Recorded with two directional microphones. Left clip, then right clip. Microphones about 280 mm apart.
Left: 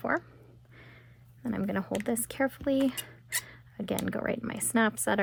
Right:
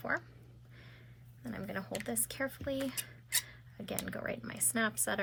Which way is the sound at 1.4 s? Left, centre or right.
Left.